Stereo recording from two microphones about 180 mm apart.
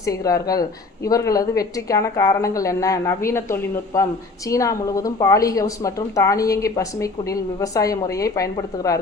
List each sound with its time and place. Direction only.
0.0 s a woman's voice: 20° left (ahead or behind)